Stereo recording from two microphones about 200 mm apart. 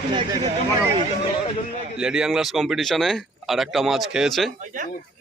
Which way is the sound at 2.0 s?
5° right (ahead or behind).